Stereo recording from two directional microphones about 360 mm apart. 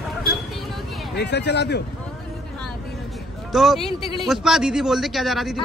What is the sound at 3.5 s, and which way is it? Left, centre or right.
A man's voice, centre.